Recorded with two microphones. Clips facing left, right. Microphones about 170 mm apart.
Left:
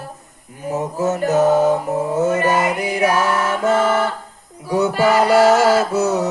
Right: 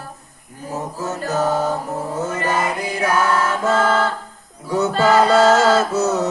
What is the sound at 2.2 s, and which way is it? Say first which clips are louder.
Music: left 4 dB; 20° left (ahead or behind).